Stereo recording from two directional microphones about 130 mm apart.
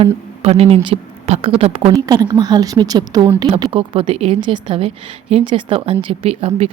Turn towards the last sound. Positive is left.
turn(degrees=-50)  # may be behind; listen again after turning